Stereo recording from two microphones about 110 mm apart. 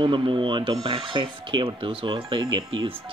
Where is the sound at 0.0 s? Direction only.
50° right (ahead or behind).